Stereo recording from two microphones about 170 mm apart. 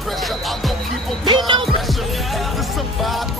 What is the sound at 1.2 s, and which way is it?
Music, 25° right (ahead or behind).